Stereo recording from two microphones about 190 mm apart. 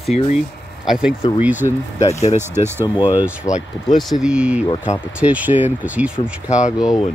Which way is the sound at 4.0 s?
Centre (ahead or behind).